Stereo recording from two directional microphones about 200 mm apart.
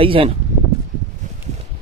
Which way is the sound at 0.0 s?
25° right (ahead or behind).